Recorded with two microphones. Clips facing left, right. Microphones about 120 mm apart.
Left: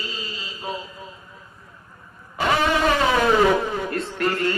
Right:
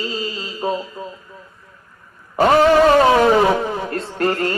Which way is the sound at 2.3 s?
40° right (ahead or behind).